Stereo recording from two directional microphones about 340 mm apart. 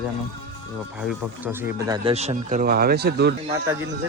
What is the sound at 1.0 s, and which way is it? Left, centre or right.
Speech, centre.